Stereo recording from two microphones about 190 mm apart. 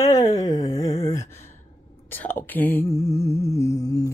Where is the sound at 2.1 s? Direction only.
10° left (ahead or behind).